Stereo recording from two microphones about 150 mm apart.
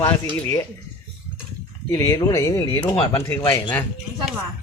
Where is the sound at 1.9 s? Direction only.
20° left (ahead or behind).